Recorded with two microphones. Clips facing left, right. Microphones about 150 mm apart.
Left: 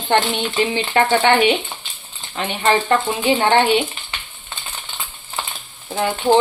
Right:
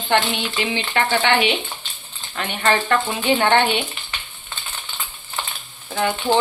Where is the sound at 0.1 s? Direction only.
40° left (ahead or behind).